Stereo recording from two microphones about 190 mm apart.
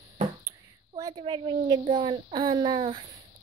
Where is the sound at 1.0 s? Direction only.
20° right (ahead or behind).